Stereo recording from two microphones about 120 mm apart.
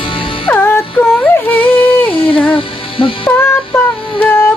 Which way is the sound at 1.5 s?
15° left (ahead or behind).